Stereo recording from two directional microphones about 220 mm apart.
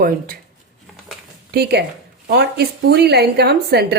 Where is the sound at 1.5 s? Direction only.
45° right (ahead or behind).